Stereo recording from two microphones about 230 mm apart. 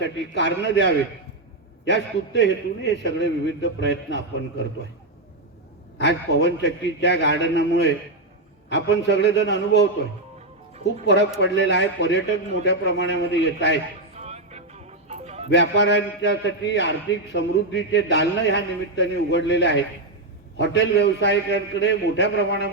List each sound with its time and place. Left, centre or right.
0.0 s a man's voice: left
6.0 s a man's voice: left
11.0 s a man's voice: left
14.2 s music: right
15.4 s a man's voice: left